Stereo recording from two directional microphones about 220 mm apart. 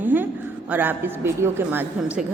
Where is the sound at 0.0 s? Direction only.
10° right (ahead or behind).